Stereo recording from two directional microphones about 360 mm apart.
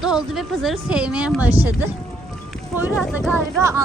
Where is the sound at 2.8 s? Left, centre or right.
Centre.